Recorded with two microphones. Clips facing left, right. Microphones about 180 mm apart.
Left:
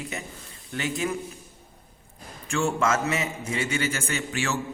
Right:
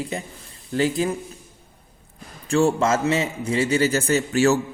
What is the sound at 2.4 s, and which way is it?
A man's voice, 35° right (ahead or behind).